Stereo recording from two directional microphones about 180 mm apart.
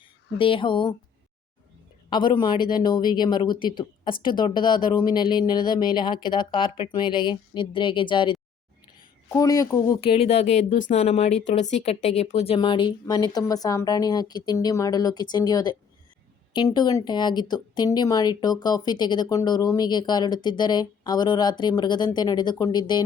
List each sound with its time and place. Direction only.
0.3 s speech: 30° left (ahead or behind)
2.0 s a woman's voice: 25° left (ahead or behind)